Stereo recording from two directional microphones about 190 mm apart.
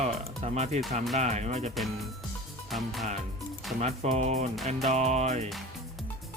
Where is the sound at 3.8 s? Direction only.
35° right (ahead or behind).